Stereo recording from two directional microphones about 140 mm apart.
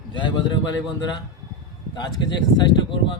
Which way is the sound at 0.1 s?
35° left (ahead or behind).